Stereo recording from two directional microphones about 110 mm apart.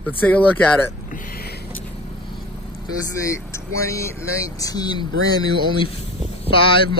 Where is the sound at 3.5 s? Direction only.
25° left (ahead or behind).